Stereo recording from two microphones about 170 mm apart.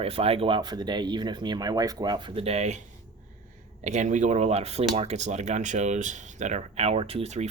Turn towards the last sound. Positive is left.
turn(degrees=-40)  # may be behind; listen again after turning